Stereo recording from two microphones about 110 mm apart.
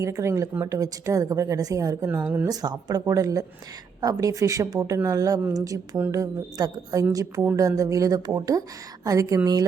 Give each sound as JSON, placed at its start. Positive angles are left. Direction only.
{"t": 0.0, "sound": "a woman's voice", "side_deg": -25}
{"t": 2.0, "sound": "speech", "side_deg": -20}
{"t": 2.5, "sound": "a woman's voice", "side_deg": -35}